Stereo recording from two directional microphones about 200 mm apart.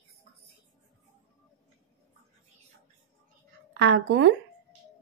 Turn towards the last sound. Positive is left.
turn(degrees=-65)  # may be behind; listen again after turning